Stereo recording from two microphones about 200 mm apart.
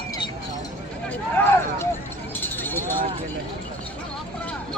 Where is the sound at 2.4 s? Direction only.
10° left (ahead or behind).